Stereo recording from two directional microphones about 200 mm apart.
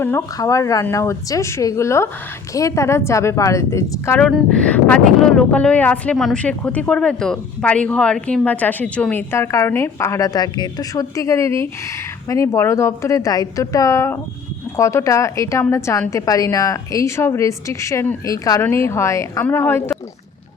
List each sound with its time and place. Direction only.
0.0 s speech: 15° left (ahead or behind)